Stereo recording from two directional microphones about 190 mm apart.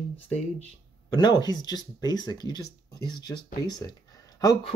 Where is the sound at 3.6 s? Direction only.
20° left (ahead or behind).